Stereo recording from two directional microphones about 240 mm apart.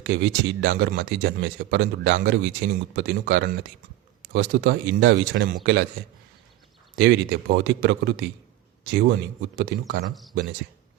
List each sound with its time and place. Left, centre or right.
0.0 s speech: right
6.9 s speech: right